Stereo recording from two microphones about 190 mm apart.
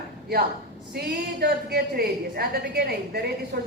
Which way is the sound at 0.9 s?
55° right (ahead or behind).